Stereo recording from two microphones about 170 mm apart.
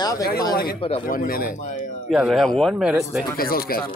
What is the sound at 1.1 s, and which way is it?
Speech, 55° left (ahead or behind).